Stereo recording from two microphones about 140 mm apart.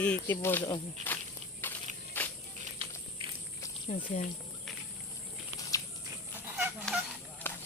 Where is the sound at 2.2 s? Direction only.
15° left (ahead or behind).